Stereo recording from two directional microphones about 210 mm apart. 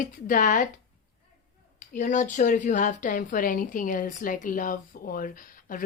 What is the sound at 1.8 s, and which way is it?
Speech, 35° left (ahead or behind).